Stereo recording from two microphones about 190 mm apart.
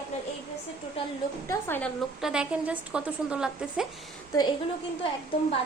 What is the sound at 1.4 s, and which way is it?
Speech, 10° left (ahead or behind).